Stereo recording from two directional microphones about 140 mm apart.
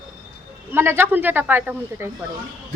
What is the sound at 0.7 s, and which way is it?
Speech, 15° right (ahead or behind).